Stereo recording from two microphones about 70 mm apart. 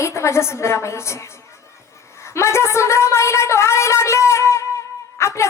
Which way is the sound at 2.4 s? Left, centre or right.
Left.